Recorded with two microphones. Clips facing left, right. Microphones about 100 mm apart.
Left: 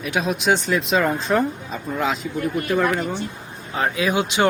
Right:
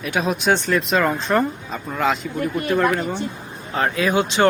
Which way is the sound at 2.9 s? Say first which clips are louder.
Right 1 dB; 5° left (ahead or behind).